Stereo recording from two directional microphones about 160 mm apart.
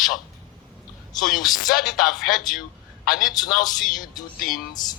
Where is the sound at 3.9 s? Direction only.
25° left (ahead or behind).